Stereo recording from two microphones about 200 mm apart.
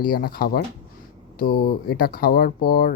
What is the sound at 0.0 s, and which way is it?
Speech, 45° left (ahead or behind).